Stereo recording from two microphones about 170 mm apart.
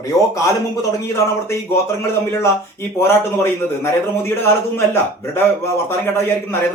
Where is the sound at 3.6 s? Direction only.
15° left (ahead or behind).